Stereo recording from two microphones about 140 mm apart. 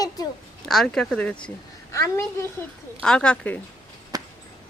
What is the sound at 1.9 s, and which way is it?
Speech, 20° left (ahead or behind).